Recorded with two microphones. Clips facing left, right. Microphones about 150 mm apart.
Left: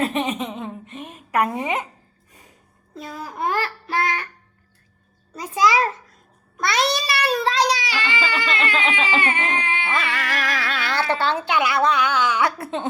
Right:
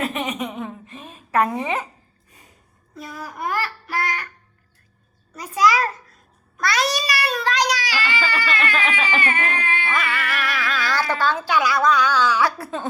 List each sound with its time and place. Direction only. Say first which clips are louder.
0.0 s a sound: left 2 dB; 30° left (ahead or behind)
2.9 s speech: left 1 dB; 25° left (ahead or behind)
5.3 s a child's voice: even; 25° left (ahead or behind)
10.1 s speech: even; 35° left (ahead or behind)